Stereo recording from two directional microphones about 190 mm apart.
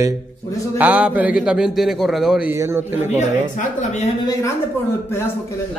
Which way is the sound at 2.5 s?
15° right (ahead or behind).